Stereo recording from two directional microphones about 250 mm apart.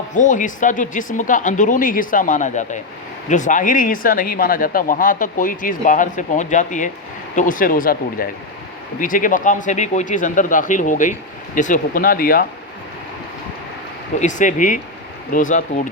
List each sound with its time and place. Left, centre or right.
0.1 s speech: left
14.2 s speech: left